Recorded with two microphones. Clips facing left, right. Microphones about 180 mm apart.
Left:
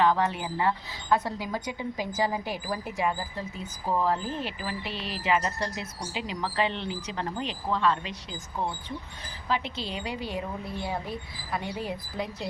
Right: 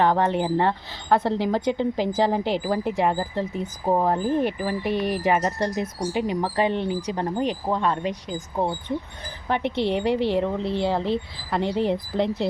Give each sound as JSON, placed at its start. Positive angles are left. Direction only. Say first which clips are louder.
{"t": 0.0, "sound": "a woman's voice", "louder": "right 4 dB", "side_deg": -60}
{"t": 1.3, "sound": "a woman's voice", "louder": "right 10 dB", "side_deg": -70}
{"t": 3.9, "sound": "speech", "louder": "right 6 dB", "side_deg": -50}
{"t": 4.8, "sound": "speech", "louder": "right 11 dB", "side_deg": -15}
{"t": 5.3, "sound": "speech", "louder": "even", "side_deg": -50}
{"t": 9.5, "sound": "a woman's voice", "louder": "right 8 dB", "side_deg": -65}
{"t": 11.9, "sound": "a woman's voice", "louder": "right 10 dB", "side_deg": -70}